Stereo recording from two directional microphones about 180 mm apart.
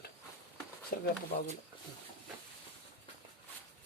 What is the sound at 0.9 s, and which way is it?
Speech, 55° left (ahead or behind).